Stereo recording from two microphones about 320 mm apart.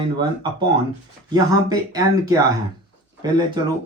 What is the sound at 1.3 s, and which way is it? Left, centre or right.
Speech, centre.